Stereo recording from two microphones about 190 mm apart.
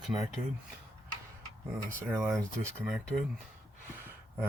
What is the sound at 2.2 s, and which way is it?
Speech, centre (ahead or behind).